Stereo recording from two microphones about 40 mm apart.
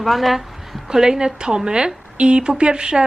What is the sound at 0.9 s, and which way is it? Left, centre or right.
A woman's voice, centre.